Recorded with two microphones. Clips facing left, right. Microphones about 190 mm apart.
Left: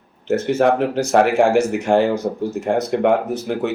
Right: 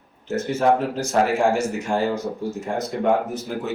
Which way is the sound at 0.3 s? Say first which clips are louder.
Left 4 dB; 70° left (ahead or behind).